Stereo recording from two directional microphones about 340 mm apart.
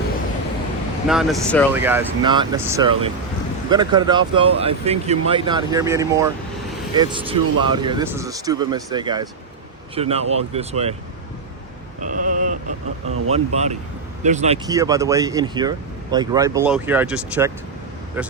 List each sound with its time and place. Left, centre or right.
1.0 s speech: centre
11.9 s a sound: right
13.3 s speech: centre